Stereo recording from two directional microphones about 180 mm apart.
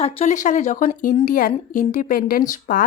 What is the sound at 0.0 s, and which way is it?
Speech, 40° left (ahead or behind).